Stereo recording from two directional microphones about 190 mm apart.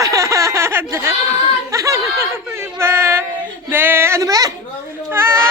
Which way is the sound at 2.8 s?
15° right (ahead or behind).